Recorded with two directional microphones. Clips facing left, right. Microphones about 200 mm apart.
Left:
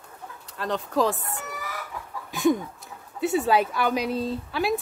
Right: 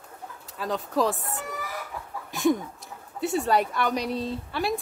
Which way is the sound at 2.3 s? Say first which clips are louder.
Left 1 dB; centre (ahead or behind).